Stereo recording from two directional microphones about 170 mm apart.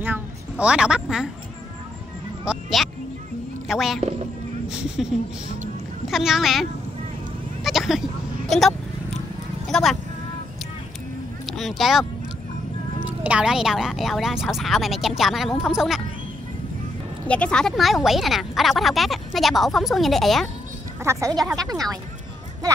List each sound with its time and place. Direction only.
0.0 s a woman's voice: 10° right (ahead or behind)
2.4 s speech: 5° right (ahead or behind)
7.6 s a sound: centre (ahead or behind)
8.5 s speech: centre (ahead or behind)
11.5 s speech: centre (ahead or behind)
17.3 s speech: 5° left (ahead or behind)
21.0 s speech: 15° right (ahead or behind)